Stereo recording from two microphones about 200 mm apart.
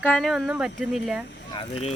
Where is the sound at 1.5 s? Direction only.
25° left (ahead or behind).